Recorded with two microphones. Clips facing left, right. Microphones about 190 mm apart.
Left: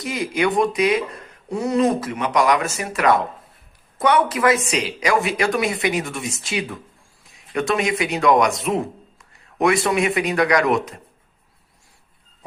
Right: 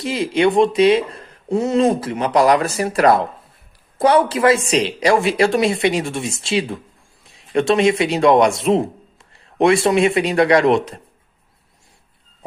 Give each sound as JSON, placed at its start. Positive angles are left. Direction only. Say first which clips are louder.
{"t": 0.0, "sound": "speech", "louder": "right 5 dB", "side_deg": -30}